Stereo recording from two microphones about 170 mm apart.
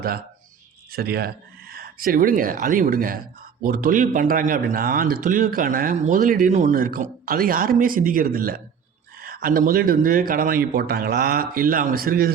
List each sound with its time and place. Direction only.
0.9 s a man's voice: 65° right (ahead or behind)